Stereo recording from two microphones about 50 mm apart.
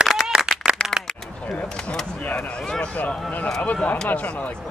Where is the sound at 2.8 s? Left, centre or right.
Left.